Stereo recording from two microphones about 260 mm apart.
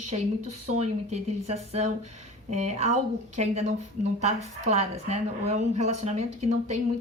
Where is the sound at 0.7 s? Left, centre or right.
Right.